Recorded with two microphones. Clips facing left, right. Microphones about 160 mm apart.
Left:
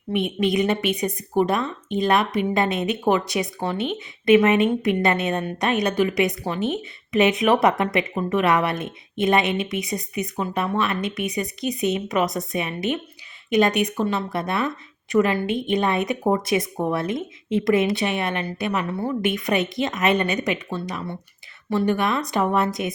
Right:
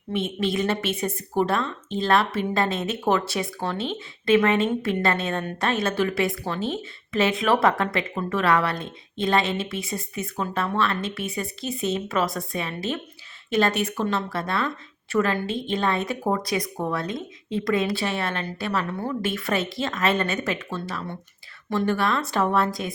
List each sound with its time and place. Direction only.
0.3 s a woman's voice: 15° left (ahead or behind)